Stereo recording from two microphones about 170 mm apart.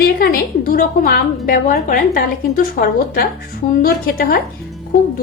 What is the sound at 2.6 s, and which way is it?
A woman's voice, 65° left (ahead or behind).